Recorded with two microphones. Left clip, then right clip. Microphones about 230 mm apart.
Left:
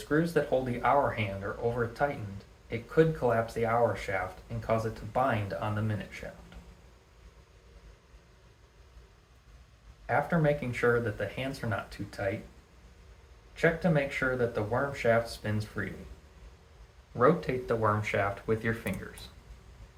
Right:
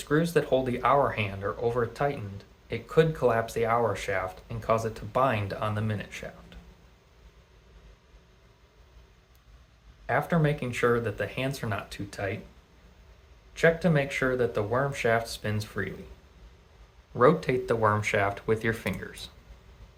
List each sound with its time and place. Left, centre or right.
0.1 s speech: right
10.1 s speech: right
13.6 s speech: right
17.2 s speech: right